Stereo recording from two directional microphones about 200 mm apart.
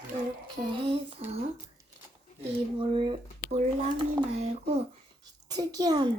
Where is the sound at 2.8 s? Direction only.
25° right (ahead or behind).